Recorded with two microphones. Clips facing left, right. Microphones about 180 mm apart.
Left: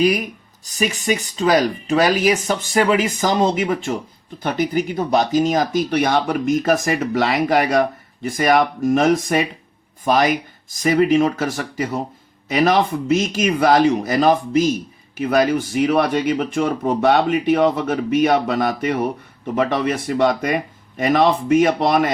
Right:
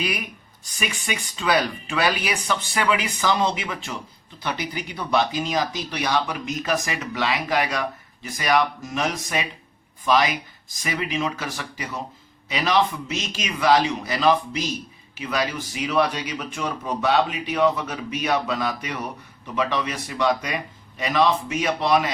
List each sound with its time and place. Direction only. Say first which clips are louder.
0.0 s speech: left 11 dB; 40° left (ahead or behind)